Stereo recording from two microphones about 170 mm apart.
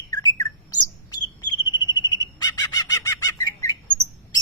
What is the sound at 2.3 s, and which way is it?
Bird, 25° left (ahead or behind).